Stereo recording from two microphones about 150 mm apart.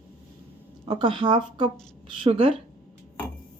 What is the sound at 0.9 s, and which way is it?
Speech, 35° right (ahead or behind).